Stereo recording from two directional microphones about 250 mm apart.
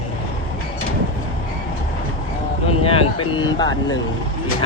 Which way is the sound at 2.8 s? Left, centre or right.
Left.